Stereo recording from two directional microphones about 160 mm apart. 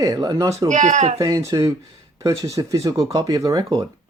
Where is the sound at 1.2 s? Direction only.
20° right (ahead or behind).